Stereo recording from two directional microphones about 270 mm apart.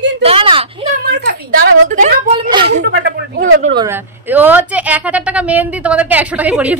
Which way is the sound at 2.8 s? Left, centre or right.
Right.